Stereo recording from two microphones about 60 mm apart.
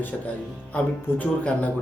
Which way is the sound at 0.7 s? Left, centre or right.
Left.